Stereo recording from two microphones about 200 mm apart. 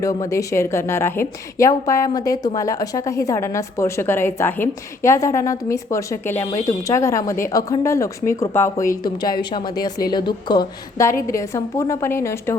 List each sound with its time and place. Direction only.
0.0 s a woman's voice: 15° left (ahead or behind)